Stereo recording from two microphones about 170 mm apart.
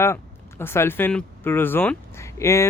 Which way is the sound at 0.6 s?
15° left (ahead or behind).